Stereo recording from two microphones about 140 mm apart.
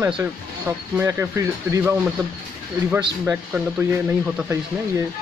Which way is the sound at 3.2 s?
10° right (ahead or behind).